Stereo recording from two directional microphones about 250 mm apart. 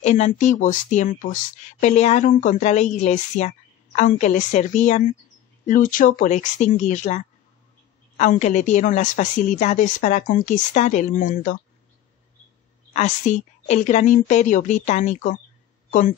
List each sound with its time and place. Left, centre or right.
0.0 s speech: left
12.9 s a woman's voice: left